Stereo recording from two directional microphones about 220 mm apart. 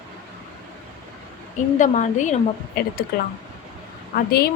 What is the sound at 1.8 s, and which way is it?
A woman's voice, 35° left (ahead or behind).